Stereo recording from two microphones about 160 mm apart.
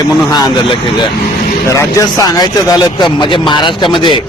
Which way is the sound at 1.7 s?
20° left (ahead or behind).